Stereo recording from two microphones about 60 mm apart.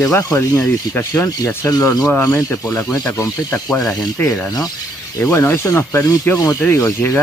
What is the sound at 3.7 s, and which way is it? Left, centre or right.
Speech, left.